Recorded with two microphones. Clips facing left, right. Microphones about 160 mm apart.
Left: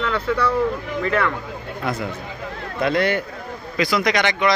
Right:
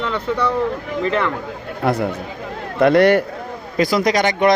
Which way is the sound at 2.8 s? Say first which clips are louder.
Right 8 dB; 65° right (ahead or behind).